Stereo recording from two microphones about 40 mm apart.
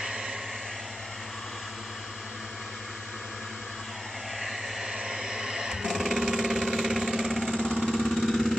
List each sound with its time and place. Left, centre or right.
4.4 s vehicle: centre
4.9 s a sound: centre
6.2 s vehicle: centre
7.5 s vehicle: centre
7.9 s vehicle: centre